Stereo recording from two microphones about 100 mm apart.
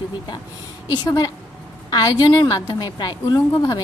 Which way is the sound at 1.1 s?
40° left (ahead or behind).